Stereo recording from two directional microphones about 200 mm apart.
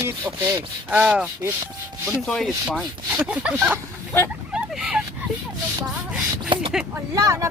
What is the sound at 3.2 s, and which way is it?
Rub, 5° right (ahead or behind).